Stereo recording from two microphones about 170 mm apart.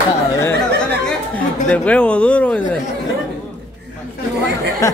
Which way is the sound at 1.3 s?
10° left (ahead or behind).